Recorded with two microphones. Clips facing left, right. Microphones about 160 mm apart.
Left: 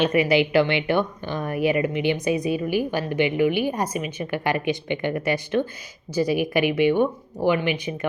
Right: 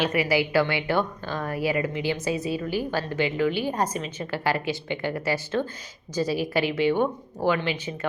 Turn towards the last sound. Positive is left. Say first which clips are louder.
# left 3 dB
turn(degrees=15)  # may be behind; listen again after turning